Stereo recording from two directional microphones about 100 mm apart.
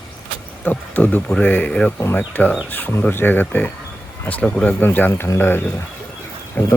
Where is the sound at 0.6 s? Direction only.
20° left (ahead or behind).